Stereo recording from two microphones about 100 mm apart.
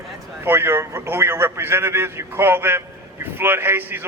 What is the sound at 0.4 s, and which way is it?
A man's voice, 25° right (ahead or behind).